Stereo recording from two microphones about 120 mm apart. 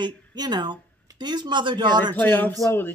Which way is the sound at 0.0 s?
40° right (ahead or behind).